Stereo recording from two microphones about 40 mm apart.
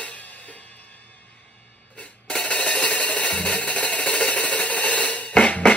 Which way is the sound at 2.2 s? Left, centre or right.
Left.